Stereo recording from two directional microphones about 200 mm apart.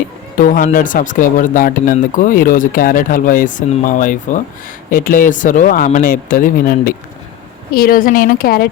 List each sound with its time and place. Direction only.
0.3 s speech: 40° left (ahead or behind)